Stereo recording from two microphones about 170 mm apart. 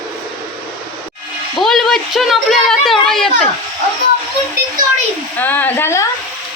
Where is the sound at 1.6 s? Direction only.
Centre (ahead or behind).